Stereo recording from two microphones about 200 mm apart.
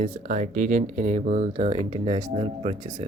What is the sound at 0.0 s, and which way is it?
Speech, 40° right (ahead or behind).